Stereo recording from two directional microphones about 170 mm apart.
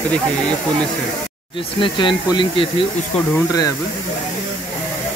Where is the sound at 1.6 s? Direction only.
30° left (ahead or behind).